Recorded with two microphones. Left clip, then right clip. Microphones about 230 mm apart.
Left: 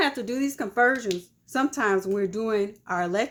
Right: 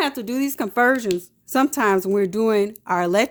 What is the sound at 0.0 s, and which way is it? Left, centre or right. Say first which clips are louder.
Speech: right 2 dB; right.